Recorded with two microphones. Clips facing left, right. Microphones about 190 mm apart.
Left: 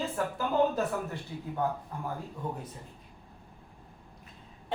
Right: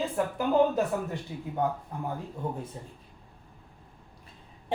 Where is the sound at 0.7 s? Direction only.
20° right (ahead or behind).